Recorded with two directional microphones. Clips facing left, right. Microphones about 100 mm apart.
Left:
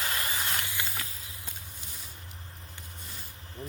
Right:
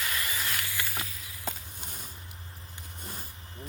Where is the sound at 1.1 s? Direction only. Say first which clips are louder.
Right 1 dB; 30° left (ahead or behind).